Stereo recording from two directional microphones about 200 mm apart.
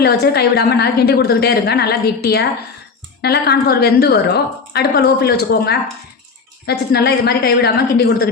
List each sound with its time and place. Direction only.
0.0 s a woman's voice: 55° left (ahead or behind)